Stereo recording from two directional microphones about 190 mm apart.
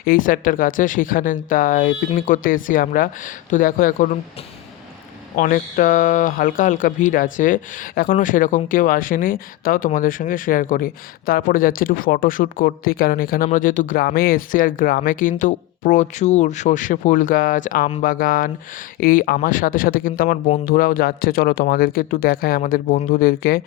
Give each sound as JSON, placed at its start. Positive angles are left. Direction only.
{"t": 0.0, "sound": "speech", "side_deg": 45}
{"t": 5.4, "sound": "speech", "side_deg": 45}